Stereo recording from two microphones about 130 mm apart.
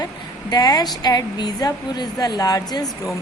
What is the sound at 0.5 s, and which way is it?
A woman's voice, 30° left (ahead or behind).